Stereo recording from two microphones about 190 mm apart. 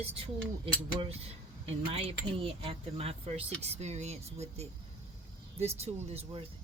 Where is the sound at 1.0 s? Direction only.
35° right (ahead or behind).